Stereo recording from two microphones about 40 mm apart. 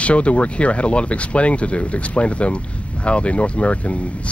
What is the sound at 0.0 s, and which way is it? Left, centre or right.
Speech, left.